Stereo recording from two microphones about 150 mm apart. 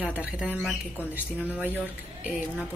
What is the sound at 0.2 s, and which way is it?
Speech, 10° right (ahead or behind).